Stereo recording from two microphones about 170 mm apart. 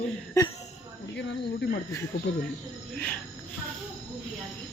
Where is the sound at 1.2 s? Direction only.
90° left.